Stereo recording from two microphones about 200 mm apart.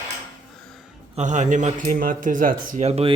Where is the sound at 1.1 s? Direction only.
35° right (ahead or behind).